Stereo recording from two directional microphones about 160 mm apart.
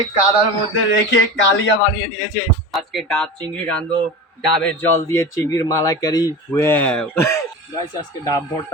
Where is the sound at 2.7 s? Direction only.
Centre (ahead or behind).